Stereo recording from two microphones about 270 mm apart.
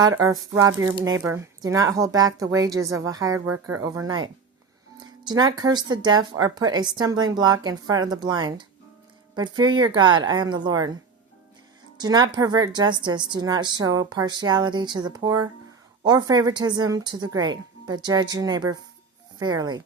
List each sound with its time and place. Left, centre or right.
0.2 s a woman's voice: centre
11.9 s a woman's voice: centre